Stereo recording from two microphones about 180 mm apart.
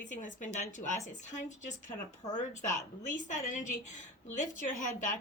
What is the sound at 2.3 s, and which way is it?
A woman's voice, 45° left (ahead or behind).